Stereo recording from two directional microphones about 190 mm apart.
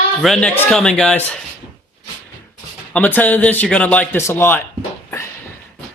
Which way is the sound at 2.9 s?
10° left (ahead or behind).